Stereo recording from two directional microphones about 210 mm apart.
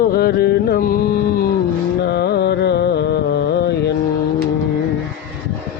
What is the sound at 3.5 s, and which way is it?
Mantra, 50° left (ahead or behind).